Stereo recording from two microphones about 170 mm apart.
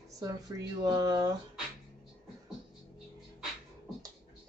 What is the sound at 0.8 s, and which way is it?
Speech, 25° right (ahead or behind).